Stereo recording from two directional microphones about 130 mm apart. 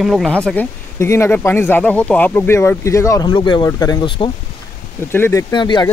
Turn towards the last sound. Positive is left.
turn(degrees=35)  # may be behind; listen again after turning